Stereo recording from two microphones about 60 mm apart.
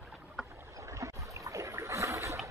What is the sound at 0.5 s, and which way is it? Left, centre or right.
Rowboat, right.